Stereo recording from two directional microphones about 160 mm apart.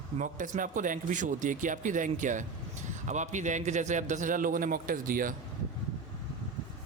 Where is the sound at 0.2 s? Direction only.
55° right (ahead or behind).